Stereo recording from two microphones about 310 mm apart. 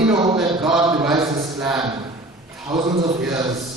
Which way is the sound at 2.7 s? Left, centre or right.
Centre.